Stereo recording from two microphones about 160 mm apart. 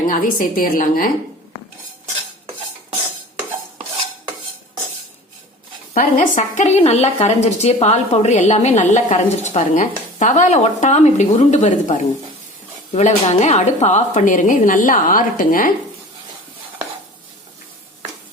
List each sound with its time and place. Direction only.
0.1 s a woman's voice: 60° left (ahead or behind)
5.9 s a woman's voice: 55° left (ahead or behind)